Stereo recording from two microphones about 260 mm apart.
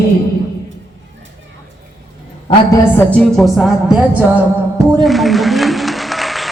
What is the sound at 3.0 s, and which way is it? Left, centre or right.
Music, centre.